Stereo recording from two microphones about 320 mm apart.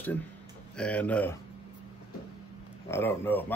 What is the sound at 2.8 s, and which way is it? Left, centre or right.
Speech, centre.